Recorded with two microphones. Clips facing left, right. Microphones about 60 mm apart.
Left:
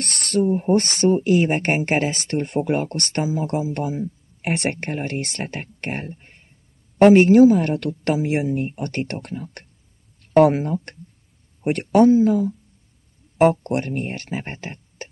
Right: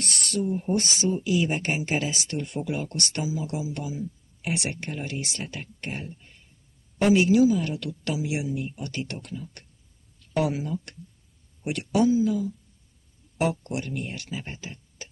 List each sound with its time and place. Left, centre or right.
0.0 s speech: left